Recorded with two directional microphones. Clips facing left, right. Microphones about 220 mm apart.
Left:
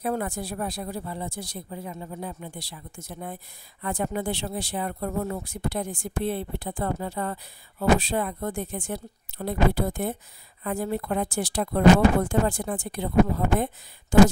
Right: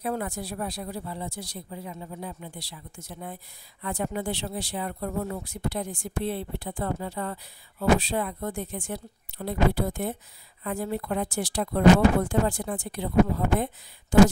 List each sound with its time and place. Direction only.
0.0 s speech: 50° left (ahead or behind)
14.1 s speech: 50° left (ahead or behind)